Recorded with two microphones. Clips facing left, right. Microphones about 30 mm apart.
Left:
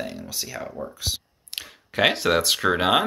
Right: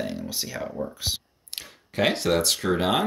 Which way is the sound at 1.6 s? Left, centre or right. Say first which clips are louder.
Left 3 dB; left.